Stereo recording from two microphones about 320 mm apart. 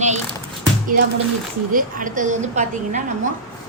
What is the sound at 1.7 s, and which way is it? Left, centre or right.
A woman's voice, right.